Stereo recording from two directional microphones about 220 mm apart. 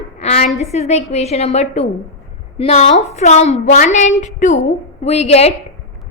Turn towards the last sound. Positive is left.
turn(degrees=30)  # may be behind; listen again after turning